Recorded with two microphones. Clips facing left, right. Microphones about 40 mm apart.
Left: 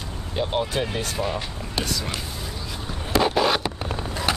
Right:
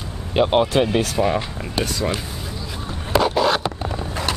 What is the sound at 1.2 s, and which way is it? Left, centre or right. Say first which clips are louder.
Speech: right 6 dB; centre.